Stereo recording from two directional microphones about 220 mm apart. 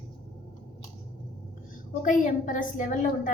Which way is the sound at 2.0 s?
35° left (ahead or behind).